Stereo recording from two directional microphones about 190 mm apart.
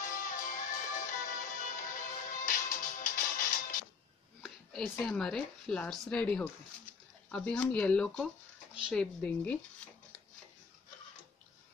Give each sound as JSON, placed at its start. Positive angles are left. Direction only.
{"t": 0.0, "sound": "music", "side_deg": 45}
{"t": 4.4, "sound": "speech", "side_deg": 5}